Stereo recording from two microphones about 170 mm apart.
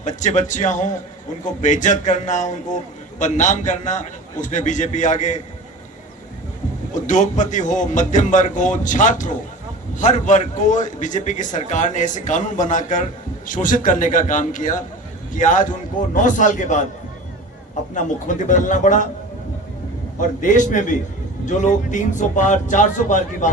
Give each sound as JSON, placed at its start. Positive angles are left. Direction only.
{"t": 0.0, "sound": "a man's voice", "side_deg": 45}
{"t": 6.9, "sound": "a man's voice", "side_deg": 45}
{"t": 17.9, "sound": "a man's voice", "side_deg": 50}
{"t": 20.4, "sound": "a man's voice", "side_deg": 50}